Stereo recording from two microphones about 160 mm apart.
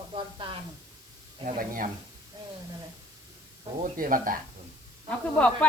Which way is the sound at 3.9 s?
60° right (ahead or behind).